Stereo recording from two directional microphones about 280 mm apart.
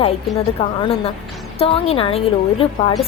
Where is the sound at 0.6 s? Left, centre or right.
Centre.